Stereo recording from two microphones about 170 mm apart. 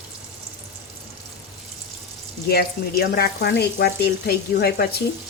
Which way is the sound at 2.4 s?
70° left (ahead or behind).